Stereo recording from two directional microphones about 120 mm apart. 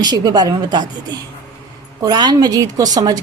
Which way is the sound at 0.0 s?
35° right (ahead or behind).